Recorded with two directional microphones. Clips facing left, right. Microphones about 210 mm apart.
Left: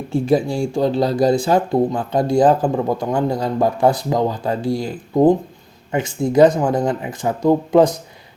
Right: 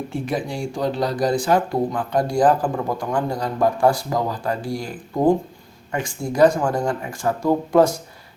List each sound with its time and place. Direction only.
0.1 s speech: 30° left (ahead or behind)